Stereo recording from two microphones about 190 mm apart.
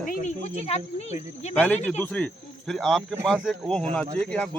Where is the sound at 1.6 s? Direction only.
10° left (ahead or behind).